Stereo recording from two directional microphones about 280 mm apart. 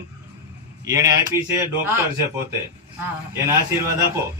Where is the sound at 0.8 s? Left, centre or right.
Centre.